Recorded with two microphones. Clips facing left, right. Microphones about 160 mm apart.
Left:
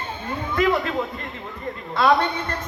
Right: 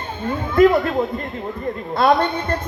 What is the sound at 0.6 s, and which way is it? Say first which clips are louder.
A man's voice: right 7 dB; 40° right (ahead or behind).